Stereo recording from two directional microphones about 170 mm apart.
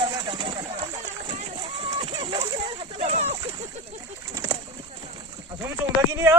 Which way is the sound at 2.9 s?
40° right (ahead or behind).